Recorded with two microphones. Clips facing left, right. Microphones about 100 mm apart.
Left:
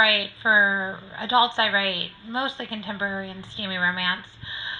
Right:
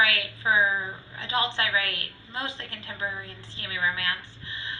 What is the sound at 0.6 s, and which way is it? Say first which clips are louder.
Speech: left 3 dB; 35° left (ahead or behind).